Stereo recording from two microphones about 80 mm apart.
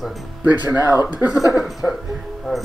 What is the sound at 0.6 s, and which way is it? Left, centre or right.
Speech, right.